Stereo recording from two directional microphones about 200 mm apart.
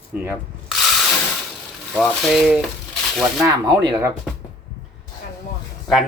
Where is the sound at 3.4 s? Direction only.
15° right (ahead or behind).